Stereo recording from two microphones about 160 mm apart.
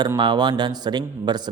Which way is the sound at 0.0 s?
25° right (ahead or behind).